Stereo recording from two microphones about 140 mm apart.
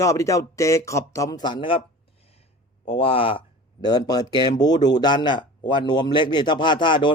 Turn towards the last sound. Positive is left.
turn(degrees=35)  # may be behind; listen again after turning